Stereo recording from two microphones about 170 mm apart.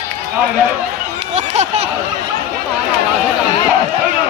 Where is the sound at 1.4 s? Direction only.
40° right (ahead or behind).